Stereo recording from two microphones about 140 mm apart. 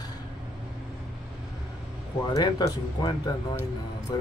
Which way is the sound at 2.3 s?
30° left (ahead or behind).